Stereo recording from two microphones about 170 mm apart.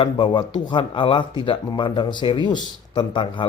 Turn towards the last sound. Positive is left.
turn(degrees=30)  # may be behind; listen again after turning